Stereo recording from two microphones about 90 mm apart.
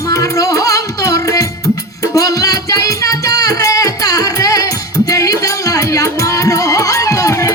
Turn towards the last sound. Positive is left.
turn(degrees=35)  # may be behind; listen again after turning